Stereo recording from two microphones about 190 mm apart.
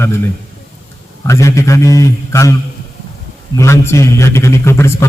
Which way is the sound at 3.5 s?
15° left (ahead or behind).